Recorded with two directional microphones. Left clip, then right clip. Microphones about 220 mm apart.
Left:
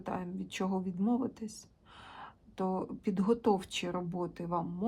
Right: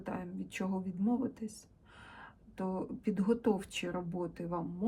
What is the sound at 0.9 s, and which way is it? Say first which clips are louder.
Speech: left 2 dB; 10° left (ahead or behind).